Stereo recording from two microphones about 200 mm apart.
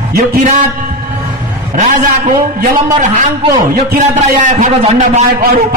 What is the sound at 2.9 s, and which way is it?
A man's voice, 40° right (ahead or behind).